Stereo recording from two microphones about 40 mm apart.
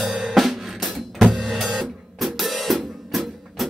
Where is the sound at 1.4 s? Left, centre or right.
Centre.